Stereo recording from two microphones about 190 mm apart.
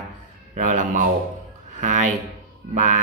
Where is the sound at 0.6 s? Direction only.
40° right (ahead or behind).